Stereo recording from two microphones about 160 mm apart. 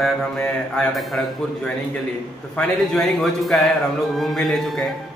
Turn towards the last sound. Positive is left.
turn(degrees=0)  # may be behind; listen again after turning